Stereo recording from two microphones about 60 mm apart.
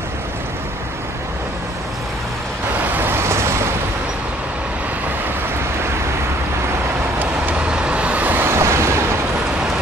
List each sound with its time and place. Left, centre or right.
2.9 s vehicle: right
7.5 s vehicle: centre; by 8.5 s right
8.5 s a sound: right